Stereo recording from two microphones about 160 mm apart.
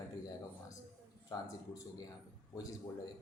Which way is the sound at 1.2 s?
20° left (ahead or behind).